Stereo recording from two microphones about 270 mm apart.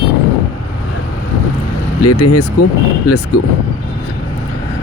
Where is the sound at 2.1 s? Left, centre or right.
Left.